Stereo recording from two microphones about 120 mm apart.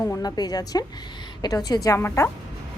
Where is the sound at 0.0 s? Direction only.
30° left (ahead or behind).